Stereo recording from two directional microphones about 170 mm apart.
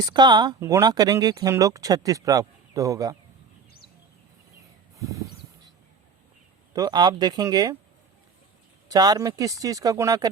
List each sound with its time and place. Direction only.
0.0 s speech: 25° right (ahead or behind)
4.9 s a sound: 20° right (ahead or behind)
6.7 s speech: 25° right (ahead or behind)
8.9 s speech: 20° right (ahead or behind)